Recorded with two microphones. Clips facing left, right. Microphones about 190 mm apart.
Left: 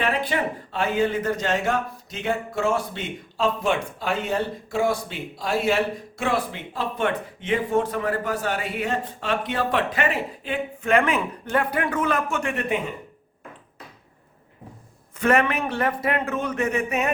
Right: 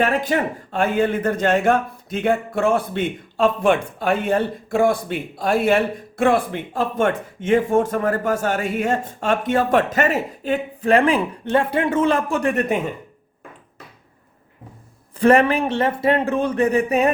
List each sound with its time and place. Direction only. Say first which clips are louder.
0.0 s a man's voice: right 5 dB; 45° right (ahead or behind)
15.2 s a man's voice: right 6 dB; 30° right (ahead or behind)